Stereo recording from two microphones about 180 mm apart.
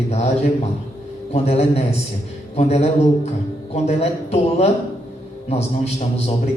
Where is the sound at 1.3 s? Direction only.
35° left (ahead or behind).